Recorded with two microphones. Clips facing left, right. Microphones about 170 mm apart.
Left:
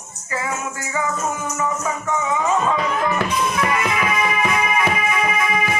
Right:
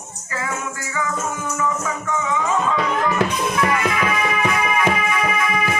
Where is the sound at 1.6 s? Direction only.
25° left (ahead or behind).